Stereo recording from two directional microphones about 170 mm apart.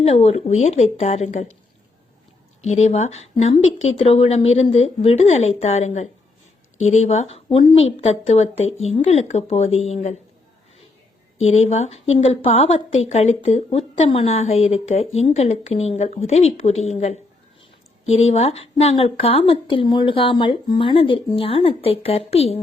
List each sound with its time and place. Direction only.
0.0 s a woman's voice: 40° left (ahead or behind)
2.6 s a woman's voice: 40° left (ahead or behind)
11.4 s a woman's voice: 40° left (ahead or behind)